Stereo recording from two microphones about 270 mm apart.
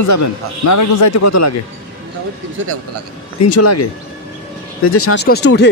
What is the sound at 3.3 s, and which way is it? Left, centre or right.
Speech, left.